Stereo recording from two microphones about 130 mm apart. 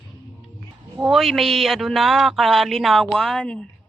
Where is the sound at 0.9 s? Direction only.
5° right (ahead or behind).